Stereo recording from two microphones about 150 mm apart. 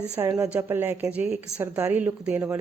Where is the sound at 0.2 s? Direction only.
20° right (ahead or behind).